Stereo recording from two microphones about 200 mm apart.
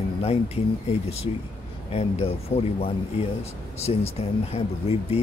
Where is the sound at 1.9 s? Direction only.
30° left (ahead or behind).